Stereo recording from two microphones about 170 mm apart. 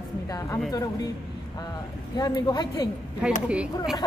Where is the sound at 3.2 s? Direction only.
5° right (ahead or behind).